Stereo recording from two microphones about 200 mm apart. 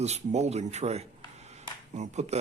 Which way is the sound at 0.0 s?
35° right (ahead or behind).